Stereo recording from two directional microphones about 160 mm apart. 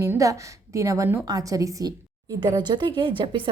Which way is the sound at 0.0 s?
20° right (ahead or behind).